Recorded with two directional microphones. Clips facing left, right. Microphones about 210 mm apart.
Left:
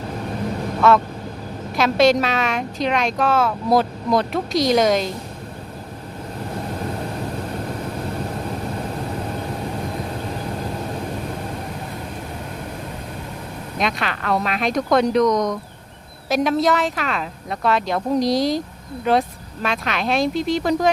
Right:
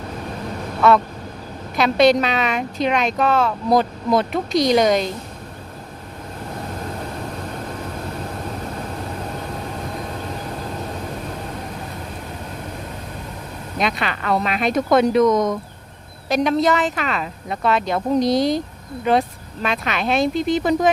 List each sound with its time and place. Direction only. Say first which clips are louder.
0.8 s quack: right 1 dB; centre (ahead or behind)
1.7 s a woman's voice: right 1 dB; centre (ahead or behind)
13.7 s a woman's voice: right 1 dB; centre (ahead or behind)
19.6 s a woman's voice: right 1 dB; centre (ahead or behind)